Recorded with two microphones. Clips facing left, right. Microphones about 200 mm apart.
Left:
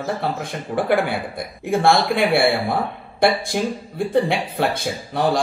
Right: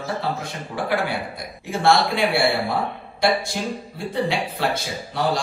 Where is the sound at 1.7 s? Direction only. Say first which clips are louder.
Left 2 dB; 55° left (ahead or behind).